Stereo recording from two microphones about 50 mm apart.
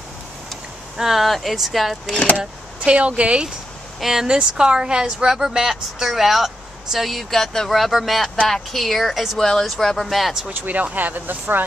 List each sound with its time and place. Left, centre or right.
0.9 s speech: centre
2.3 s speech: right
4.0 s speech: centre
9.4 s speech: centre
10.5 s speech: right